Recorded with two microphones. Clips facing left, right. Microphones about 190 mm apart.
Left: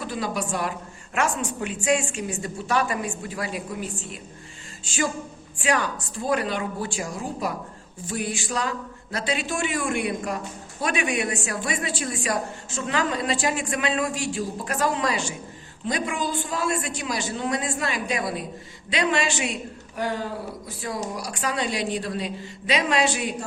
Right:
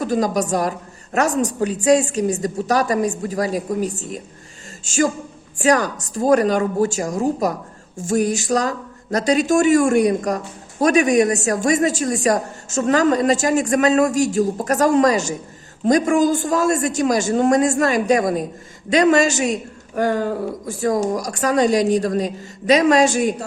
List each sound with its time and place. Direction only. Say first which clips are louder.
0.0 s a woman's voice: right 9 dB; 40° right (ahead or behind)